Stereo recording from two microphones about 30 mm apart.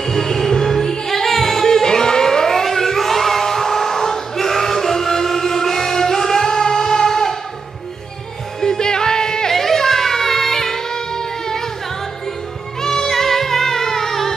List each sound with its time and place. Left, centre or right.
0.0 s music: centre
8.5 s music: left
9.5 s child singing: centre
12.8 s music: centre